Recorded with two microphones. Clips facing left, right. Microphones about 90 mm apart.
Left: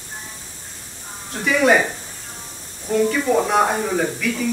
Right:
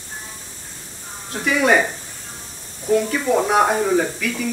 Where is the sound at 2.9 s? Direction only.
5° right (ahead or behind).